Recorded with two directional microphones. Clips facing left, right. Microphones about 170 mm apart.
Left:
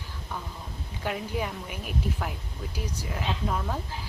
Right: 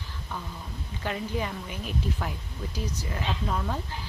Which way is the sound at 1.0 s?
10° left (ahead or behind).